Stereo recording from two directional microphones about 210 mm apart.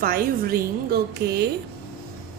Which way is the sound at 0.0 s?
45° right (ahead or behind).